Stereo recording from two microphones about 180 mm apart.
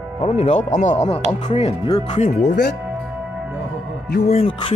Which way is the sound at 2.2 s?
65° left (ahead or behind).